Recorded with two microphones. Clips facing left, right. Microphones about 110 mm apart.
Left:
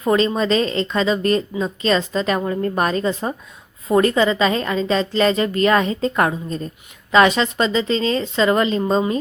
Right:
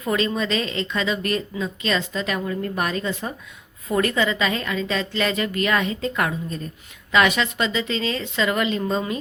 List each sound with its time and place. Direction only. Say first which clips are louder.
0.0 s a woman's voice: left 5 dB; 35° left (ahead or behind)